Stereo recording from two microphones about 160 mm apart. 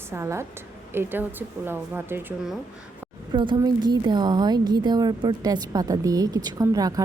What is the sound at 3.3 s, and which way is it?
A woman's voice, 30° right (ahead or behind).